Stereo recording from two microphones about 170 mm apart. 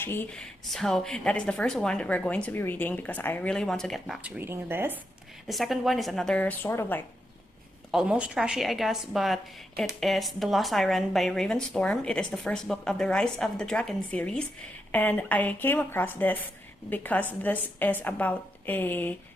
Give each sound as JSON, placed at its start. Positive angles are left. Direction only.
{"t": 0.0, "sound": "a woman's voice", "side_deg": 10}
{"t": 4.4, "sound": "speech", "side_deg": -15}
{"t": 5.5, "sound": "a woman's voice", "side_deg": 0}
{"t": 7.9, "sound": "a woman's voice", "side_deg": -5}